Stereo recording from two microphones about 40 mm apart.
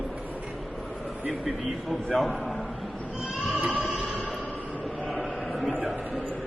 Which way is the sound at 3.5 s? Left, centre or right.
Right.